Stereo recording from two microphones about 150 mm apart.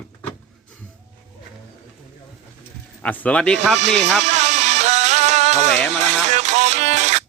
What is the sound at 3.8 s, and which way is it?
Music, 50° right (ahead or behind).